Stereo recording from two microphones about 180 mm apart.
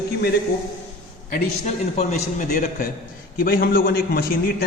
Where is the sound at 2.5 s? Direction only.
55° left (ahead or behind).